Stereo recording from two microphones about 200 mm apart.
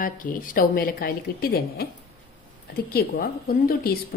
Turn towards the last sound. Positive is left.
turn(degrees=50)  # may be behind; listen again after turning